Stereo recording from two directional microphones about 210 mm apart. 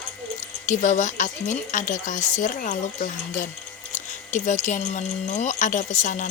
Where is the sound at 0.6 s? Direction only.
35° left (ahead or behind).